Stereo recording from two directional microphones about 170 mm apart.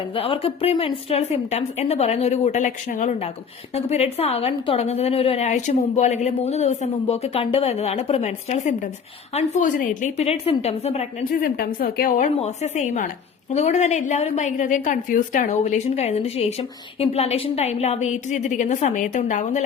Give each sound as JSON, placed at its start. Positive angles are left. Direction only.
{"t": 0.1, "sound": "a woman's voice", "side_deg": 30}
{"t": 11.3, "sound": "a woman's voice", "side_deg": 55}
{"t": 12.4, "sound": "a woman's voice", "side_deg": 40}